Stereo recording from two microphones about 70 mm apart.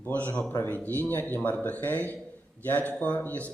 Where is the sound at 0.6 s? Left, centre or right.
Left.